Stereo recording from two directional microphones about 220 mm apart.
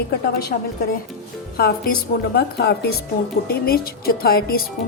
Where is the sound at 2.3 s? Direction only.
50° left (ahead or behind).